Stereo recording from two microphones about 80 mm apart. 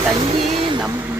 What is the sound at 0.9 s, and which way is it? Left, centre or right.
Music, right.